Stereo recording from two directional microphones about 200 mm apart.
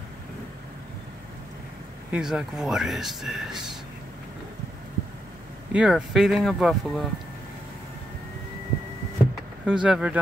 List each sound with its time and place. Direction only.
2.0 s speech: 5° right (ahead or behind)
5.7 s speech: 5° right (ahead or behind)
9.7 s speech: 5° right (ahead or behind)